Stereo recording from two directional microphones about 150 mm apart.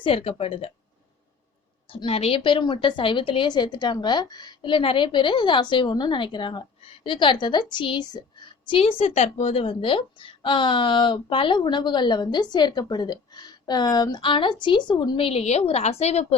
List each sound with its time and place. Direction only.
0.0 s speech: 40° left (ahead or behind)
1.9 s speech: 40° left (ahead or behind)